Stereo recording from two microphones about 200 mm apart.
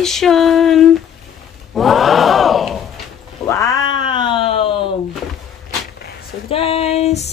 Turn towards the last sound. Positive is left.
turn(degrees=30)  # may be behind; listen again after turning